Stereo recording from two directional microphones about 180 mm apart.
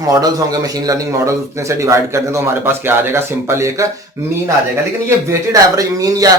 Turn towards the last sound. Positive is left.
turn(degrees=-20)  # may be behind; listen again after turning